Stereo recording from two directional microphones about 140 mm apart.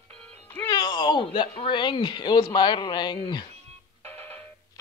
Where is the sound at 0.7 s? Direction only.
30° left (ahead or behind).